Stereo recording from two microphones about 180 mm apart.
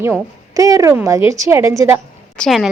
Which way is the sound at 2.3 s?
Centre (ahead or behind).